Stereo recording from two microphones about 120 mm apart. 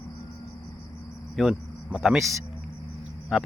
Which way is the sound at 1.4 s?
5° right (ahead or behind).